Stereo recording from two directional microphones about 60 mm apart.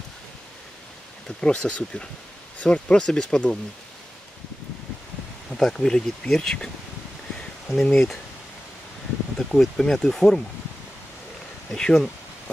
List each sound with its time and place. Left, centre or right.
1.4 s speech: centre
5.5 s speech: centre
7.8 s speech: centre
9.4 s speech: centre
11.7 s speech: centre